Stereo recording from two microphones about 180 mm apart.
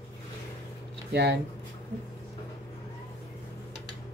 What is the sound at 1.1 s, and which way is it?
Speech, 70° right (ahead or behind).